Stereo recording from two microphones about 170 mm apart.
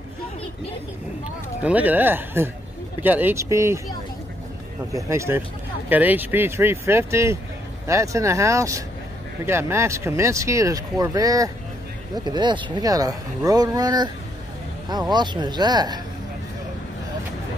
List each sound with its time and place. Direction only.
1.6 s speech: 10° right (ahead or behind)
4.9 s speech: 15° right (ahead or behind)